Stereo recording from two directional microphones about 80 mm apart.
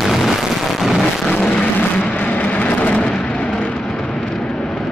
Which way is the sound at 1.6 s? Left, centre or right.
Centre.